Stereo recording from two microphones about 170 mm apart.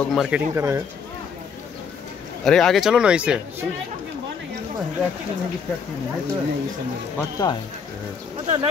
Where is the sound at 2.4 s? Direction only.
Centre (ahead or behind).